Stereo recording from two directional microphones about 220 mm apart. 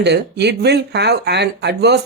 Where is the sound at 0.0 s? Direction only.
50° right (ahead or behind).